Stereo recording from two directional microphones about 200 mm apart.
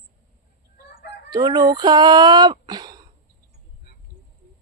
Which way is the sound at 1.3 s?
20° right (ahead or behind).